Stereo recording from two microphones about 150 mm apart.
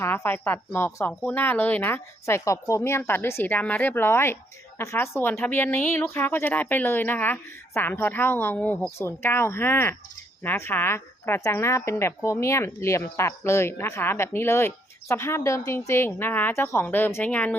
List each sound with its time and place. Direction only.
0.0 s a woman's voice: 15° left (ahead or behind)